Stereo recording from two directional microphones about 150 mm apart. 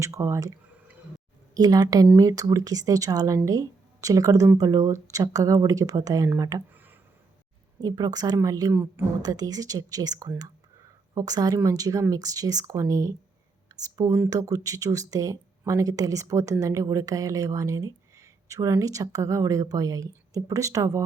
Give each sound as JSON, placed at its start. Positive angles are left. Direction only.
{"t": 0.0, "sound": "speech", "side_deg": -20}
{"t": 1.5, "sound": "speech", "side_deg": -25}